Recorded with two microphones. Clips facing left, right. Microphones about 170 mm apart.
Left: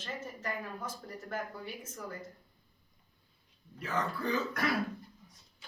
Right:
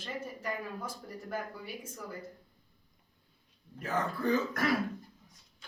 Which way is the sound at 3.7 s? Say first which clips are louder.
Right 1 dB; 45° right (ahead or behind).